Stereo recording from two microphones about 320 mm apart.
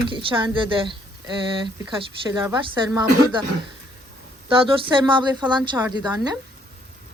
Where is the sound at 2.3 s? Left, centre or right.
Centre.